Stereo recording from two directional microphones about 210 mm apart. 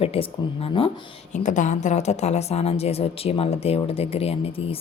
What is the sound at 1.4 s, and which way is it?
Speech, 35° left (ahead or behind).